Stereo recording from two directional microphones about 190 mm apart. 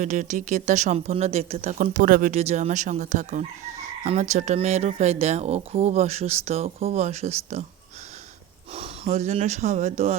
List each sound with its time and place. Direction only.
0.0 s speech: 40° right (ahead or behind)
2.3 s speech: 35° right (ahead or behind)
8.7 s speech: 35° right (ahead or behind)